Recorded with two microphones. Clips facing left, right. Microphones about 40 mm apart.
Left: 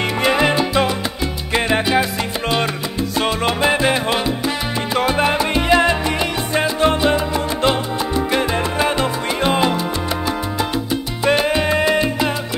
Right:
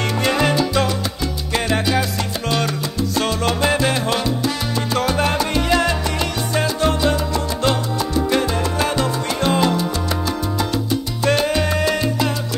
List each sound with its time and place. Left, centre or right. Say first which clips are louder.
0.2 s salsa music: left 2 dB; centre
11.2 s salsa music: left 2 dB; centre